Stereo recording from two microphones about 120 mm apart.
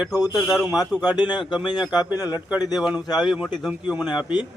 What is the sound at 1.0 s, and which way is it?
Speech, 35° left (ahead or behind).